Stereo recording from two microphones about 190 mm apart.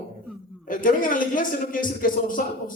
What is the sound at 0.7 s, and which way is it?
Speech, 45° left (ahead or behind).